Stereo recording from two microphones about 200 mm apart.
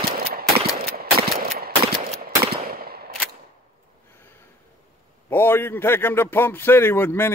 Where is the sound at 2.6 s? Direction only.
50° right (ahead or behind).